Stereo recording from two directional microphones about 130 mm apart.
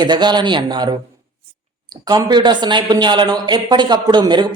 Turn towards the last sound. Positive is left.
turn(degrees=-35)  # may be behind; listen again after turning